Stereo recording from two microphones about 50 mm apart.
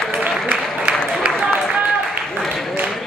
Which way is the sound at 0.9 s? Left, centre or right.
Right.